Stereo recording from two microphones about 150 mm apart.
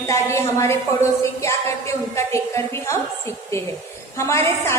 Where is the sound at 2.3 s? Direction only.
20° left (ahead or behind).